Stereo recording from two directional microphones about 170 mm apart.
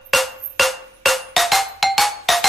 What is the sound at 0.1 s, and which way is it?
Music, centre (ahead or behind).